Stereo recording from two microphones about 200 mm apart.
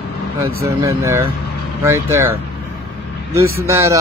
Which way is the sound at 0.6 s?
15° right (ahead or behind).